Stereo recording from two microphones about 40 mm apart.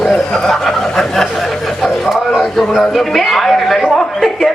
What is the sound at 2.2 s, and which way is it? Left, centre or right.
A man's voice, centre.